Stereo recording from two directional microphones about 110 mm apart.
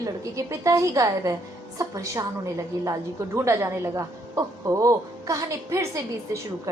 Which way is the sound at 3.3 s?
25° right (ahead or behind).